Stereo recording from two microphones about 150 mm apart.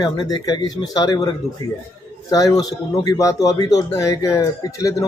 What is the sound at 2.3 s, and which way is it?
Speech, 25° left (ahead or behind).